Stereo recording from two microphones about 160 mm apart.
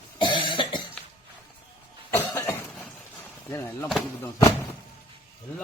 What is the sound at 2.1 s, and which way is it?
Cough, 15° left (ahead or behind).